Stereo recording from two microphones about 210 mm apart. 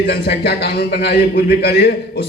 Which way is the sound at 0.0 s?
50° left (ahead or behind).